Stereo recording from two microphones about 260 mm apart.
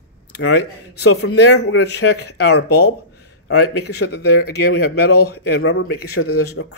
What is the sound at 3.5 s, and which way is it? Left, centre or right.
Speech, left.